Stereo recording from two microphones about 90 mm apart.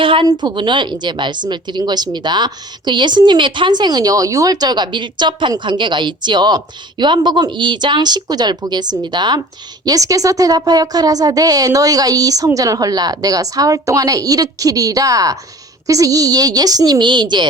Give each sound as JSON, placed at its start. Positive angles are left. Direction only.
{"t": 0.0, "sound": "a woman's voice", "side_deg": -70}
{"t": 0.3, "sound": "a woman's voice", "side_deg": -60}
{"t": 9.8, "sound": "a woman's voice", "side_deg": -40}